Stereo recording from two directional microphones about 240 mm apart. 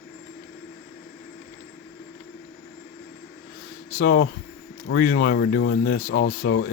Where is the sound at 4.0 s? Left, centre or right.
Left.